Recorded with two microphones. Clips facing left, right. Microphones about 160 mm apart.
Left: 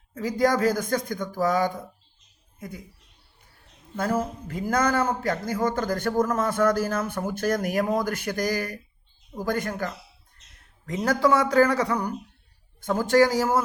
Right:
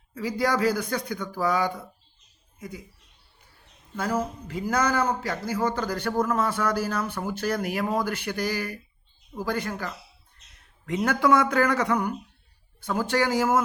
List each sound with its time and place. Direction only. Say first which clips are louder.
0.1 s speech: left 3 dB; 50° left (ahead or behind)
3.9 s speech: left 2 dB; 50° left (ahead or behind)
10.8 s speech: even; 35° left (ahead or behind)
12.8 s speech: left 5 dB; 45° left (ahead or behind)